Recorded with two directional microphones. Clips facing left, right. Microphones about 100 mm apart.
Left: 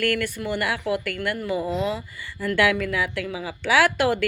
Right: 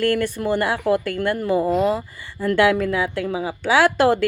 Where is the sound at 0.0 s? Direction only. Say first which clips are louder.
Right 5 dB; 30° right (ahead or behind).